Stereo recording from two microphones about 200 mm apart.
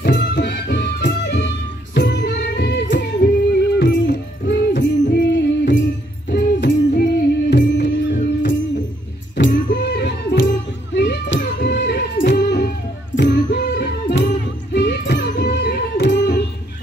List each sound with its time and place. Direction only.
0.0 s music: 60° left (ahead or behind)
9.7 s music: 60° left (ahead or behind)